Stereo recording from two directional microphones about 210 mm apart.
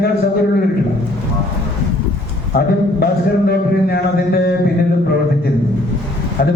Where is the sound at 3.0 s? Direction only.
50° left (ahead or behind).